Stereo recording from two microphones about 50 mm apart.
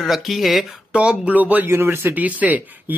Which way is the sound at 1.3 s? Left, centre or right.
Right.